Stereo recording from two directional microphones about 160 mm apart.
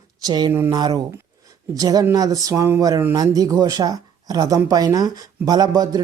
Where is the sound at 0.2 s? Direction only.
25° right (ahead or behind).